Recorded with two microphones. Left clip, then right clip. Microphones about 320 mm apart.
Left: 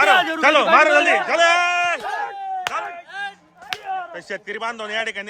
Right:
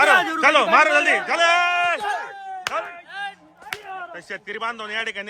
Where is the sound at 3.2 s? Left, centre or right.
Left.